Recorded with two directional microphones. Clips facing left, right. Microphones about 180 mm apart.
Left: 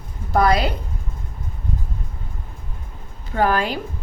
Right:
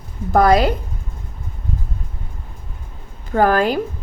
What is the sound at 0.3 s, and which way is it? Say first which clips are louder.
Speech: right 4 dB; 45° right (ahead or behind).